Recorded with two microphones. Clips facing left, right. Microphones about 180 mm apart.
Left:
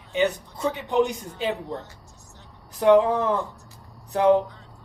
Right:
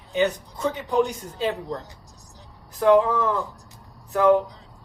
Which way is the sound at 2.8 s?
20° left (ahead or behind).